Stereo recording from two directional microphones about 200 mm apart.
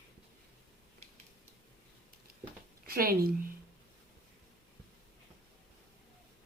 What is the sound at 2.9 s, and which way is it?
Speech, 50° right (ahead or behind).